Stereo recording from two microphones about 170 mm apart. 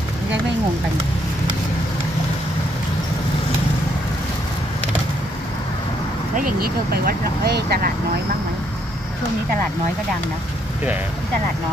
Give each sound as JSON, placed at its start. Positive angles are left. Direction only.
{"t": 6.3, "sound": "speech", "side_deg": -60}